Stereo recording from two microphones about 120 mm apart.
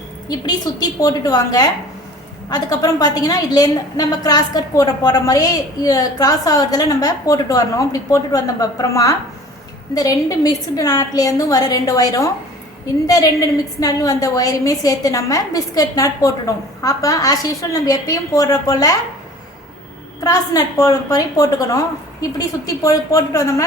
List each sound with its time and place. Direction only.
0.3 s a woman's voice: 35° left (ahead or behind)
20.2 s a woman's voice: 30° left (ahead or behind)